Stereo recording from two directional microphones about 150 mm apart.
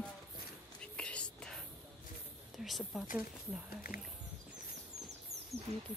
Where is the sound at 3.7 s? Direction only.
75° left (ahead or behind).